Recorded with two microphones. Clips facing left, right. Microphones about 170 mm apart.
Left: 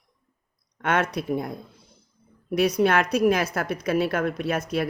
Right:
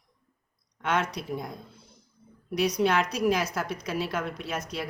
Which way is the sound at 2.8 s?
55° left (ahead or behind).